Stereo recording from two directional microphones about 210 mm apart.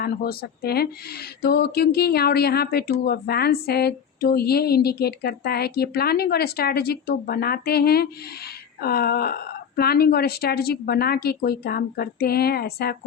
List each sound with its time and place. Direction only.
0.0 s speech: 45° left (ahead or behind)